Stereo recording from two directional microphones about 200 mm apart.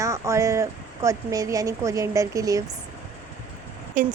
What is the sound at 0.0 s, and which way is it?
A woman's voice, 15° right (ahead or behind).